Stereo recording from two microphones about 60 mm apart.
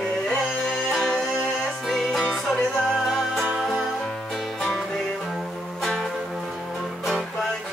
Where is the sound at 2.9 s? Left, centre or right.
Centre.